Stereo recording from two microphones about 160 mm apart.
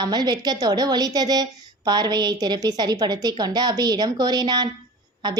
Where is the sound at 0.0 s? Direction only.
25° right (ahead or behind).